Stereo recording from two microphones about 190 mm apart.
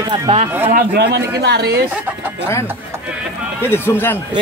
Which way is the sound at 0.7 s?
50° right (ahead or behind).